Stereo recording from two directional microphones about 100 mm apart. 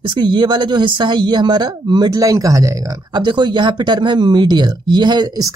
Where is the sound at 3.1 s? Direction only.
50° right (ahead or behind).